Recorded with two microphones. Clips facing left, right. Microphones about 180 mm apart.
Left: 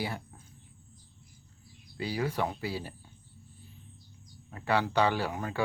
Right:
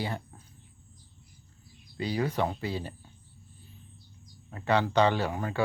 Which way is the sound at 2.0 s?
10° left (ahead or behind).